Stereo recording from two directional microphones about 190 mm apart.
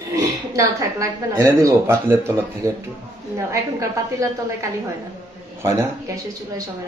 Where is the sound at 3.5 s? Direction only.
15° right (ahead or behind).